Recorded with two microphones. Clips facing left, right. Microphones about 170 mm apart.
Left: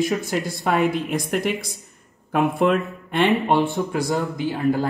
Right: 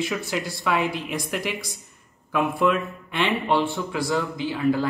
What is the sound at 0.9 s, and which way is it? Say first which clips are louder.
Speech: left 5 dB; 50° left (ahead or behind).